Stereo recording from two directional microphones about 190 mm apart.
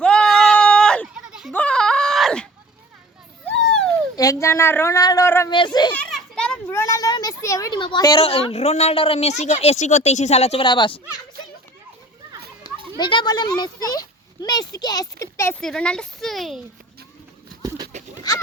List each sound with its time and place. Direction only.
0.0 s a sound: 5° left (ahead or behind)
1.5 s screaming: 5° left (ahead or behind)
4.1 s speech: 15° left (ahead or behind)
5.9 s a child's voice: 5° left (ahead or behind); by 11.0 s 25° left (ahead or behind)
13.0 s speech: 25° left (ahead or behind)
15.6 s speech: 5° left (ahead or behind)
17.9 s a sound: 35° right (ahead or behind)